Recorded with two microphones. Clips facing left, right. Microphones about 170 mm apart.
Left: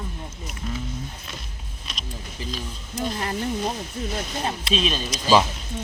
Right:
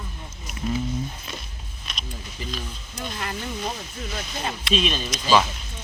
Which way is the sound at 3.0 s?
35° left (ahead or behind).